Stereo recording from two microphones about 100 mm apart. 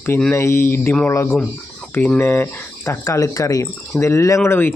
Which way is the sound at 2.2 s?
25° left (ahead or behind).